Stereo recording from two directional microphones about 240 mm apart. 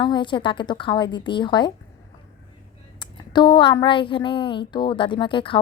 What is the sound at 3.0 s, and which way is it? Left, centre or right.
Speech, centre.